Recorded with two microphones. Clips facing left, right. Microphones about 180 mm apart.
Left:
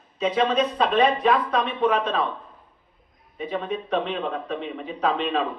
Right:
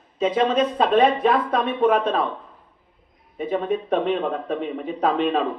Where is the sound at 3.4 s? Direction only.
50° right (ahead or behind).